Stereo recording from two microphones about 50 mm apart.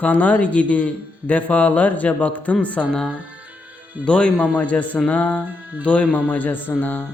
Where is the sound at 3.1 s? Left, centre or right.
Right.